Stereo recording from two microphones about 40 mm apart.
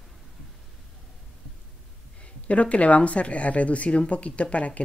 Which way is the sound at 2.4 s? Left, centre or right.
Left.